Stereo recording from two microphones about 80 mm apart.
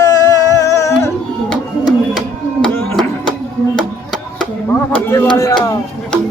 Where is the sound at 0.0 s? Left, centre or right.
Left.